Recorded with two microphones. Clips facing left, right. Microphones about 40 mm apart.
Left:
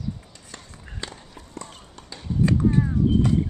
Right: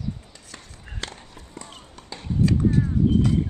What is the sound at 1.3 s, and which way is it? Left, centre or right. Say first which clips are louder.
Run: left 2 dB; centre.